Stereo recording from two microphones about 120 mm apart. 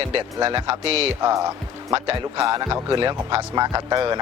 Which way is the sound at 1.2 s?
25° right (ahead or behind).